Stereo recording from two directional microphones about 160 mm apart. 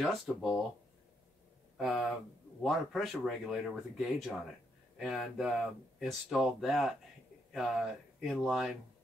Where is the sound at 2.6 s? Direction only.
Centre (ahead or behind).